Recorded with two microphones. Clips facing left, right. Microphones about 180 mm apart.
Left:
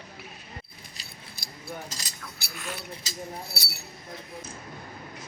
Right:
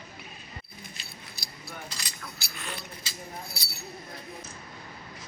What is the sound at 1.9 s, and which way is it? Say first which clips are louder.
Speech: left 1 dB; 40° left (ahead or behind).